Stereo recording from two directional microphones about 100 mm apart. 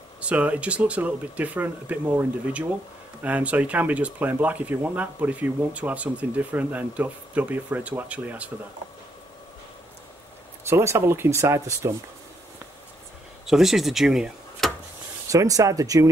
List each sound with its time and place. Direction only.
0.2 s speech: 15° right (ahead or behind)
10.7 s speech: 25° right (ahead or behind)
13.5 s speech: 5° right (ahead or behind)
15.2 s speech: 35° right (ahead or behind)